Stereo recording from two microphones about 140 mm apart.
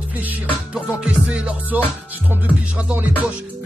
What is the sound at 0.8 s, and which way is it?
Music, 5° right (ahead or behind).